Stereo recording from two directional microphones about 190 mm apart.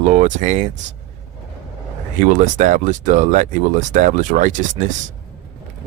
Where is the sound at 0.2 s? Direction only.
40° right (ahead or behind).